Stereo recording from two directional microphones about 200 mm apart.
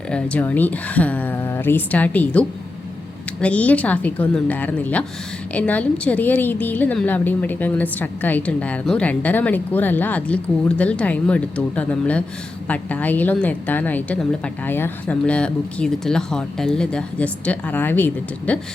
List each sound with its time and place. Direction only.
0.1 s a woman's voice: 5° left (ahead or behind)
3.4 s a woman's voice: 5° left (ahead or behind)